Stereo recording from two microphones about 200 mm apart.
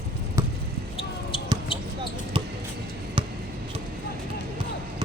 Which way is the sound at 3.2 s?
25° right (ahead or behind).